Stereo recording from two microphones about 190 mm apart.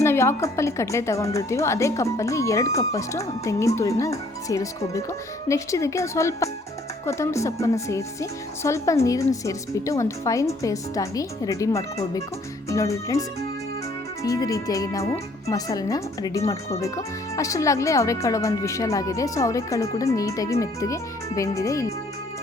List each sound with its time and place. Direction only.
0.0 s a woman's voice: 15° left (ahead or behind)